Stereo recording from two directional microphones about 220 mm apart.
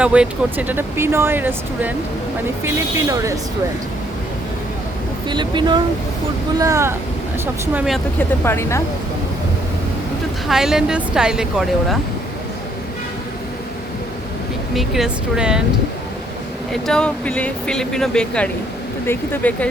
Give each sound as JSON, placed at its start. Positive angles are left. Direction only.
{"t": 0.0, "sound": "speech", "side_deg": -5}
{"t": 5.3, "sound": "speech", "side_deg": -20}
{"t": 8.4, "sound": "speech", "side_deg": 10}
{"t": 10.5, "sound": "speech", "side_deg": 0}
{"t": 14.8, "sound": "speech", "side_deg": 0}
{"t": 16.8, "sound": "speech", "side_deg": 5}